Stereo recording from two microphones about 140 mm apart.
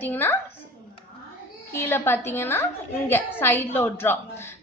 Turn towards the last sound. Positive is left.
turn(degrees=15)  # may be behind; listen again after turning